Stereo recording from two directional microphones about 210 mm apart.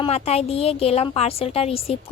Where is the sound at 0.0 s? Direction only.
30° left (ahead or behind).